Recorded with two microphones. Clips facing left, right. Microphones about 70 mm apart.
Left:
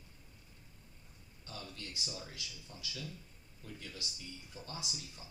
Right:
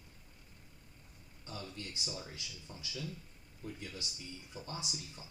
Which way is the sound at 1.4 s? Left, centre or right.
Right.